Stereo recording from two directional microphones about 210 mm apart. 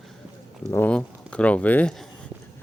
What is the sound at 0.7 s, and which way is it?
Speech, 5° left (ahead or behind).